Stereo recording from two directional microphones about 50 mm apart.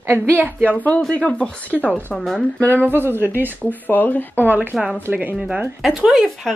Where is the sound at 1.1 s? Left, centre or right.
Left.